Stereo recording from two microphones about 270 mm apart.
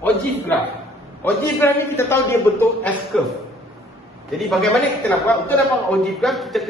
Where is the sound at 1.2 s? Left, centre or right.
Centre.